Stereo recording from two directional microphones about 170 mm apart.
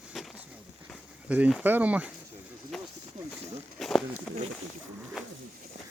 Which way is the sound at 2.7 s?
Centre (ahead or behind).